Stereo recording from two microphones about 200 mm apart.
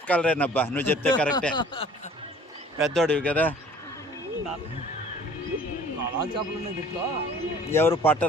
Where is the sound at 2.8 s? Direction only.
5° left (ahead or behind).